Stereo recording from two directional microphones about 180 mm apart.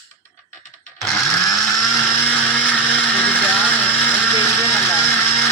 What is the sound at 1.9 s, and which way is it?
Blender, 10° left (ahead or behind).